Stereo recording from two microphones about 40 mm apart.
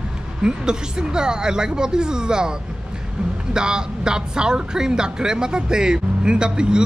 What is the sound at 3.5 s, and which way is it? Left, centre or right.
Speech, centre.